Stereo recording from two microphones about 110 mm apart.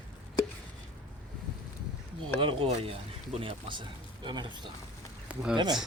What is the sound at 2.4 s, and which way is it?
Speech, 50° right (ahead or behind).